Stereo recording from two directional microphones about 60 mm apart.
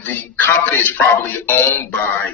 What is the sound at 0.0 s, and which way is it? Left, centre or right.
Music, left.